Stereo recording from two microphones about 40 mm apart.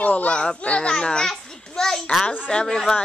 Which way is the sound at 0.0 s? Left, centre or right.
Left.